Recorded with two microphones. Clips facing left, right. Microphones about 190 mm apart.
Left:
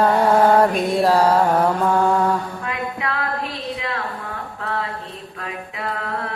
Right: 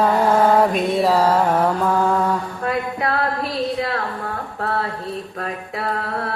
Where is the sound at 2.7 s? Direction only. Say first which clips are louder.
Right 6 dB; 35° right (ahead or behind).